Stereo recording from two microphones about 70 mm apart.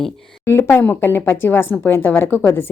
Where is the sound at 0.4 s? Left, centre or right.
Left.